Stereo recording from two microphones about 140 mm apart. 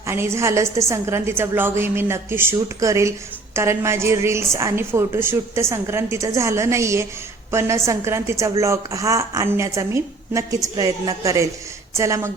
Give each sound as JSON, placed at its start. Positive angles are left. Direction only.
{"t": 0.0, "sound": "a woman's voice", "side_deg": -20}